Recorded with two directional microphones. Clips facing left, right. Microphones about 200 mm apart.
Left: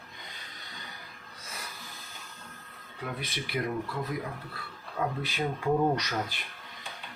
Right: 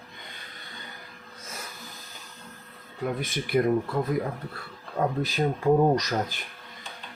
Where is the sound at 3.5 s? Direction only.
50° right (ahead or behind).